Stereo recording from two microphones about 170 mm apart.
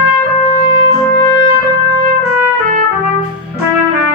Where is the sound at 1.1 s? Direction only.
30° left (ahead or behind).